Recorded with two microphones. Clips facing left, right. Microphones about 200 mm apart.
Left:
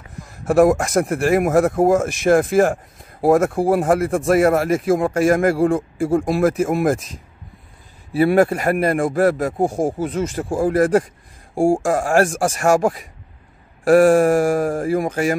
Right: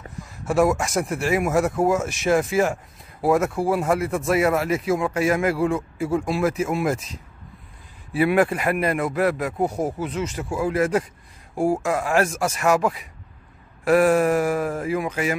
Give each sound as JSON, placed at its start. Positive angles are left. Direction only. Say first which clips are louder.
{"t": 0.5, "sound": "speech", "louder": "left 6 dB", "side_deg": 55}
{"t": 8.1, "sound": "a man's voice", "louder": "left 4 dB", "side_deg": 40}
{"t": 11.5, "sound": "speech", "louder": "left 5 dB", "side_deg": 30}
{"t": 11.8, "sound": "speech", "louder": "left 5 dB", "side_deg": 45}